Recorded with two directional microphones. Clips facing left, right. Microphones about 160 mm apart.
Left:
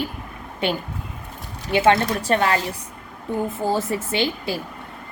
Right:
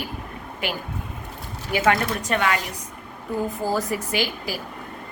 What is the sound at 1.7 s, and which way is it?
A woman's voice, 25° left (ahead or behind).